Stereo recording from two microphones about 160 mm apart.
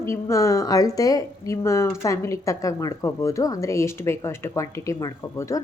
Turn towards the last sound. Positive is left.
turn(degrees=20)  # may be behind; listen again after turning